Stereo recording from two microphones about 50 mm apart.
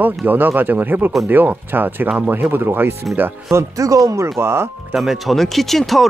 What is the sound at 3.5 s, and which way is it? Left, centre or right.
Speech, right.